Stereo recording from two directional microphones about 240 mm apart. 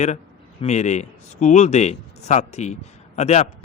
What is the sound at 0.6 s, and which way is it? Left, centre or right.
Speech, left.